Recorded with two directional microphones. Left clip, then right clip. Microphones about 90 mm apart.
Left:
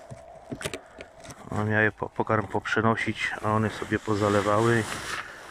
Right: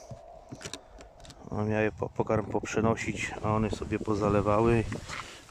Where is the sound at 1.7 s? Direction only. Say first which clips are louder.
Left 5 dB; 70° right (ahead or behind).